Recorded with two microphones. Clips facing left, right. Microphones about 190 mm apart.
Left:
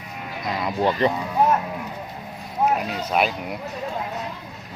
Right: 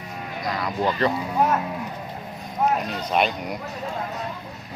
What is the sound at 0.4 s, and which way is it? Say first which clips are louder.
Speech: left 2 dB; 20° left (ahead or behind).